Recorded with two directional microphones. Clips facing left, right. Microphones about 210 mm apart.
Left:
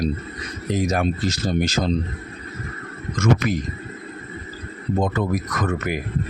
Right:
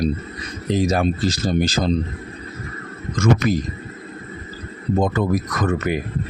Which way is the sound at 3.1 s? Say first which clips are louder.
Right 2 dB; 30° right (ahead or behind).